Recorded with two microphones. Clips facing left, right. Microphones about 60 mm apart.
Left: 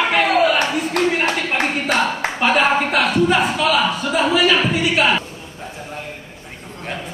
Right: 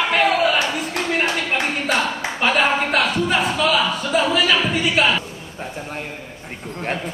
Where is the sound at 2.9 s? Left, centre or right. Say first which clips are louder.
Left 3 dB; centre.